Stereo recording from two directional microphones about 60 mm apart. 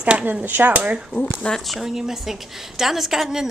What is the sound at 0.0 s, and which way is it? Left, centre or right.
Speech, right.